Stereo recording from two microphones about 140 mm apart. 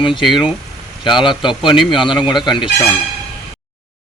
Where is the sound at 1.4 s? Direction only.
35° left (ahead or behind).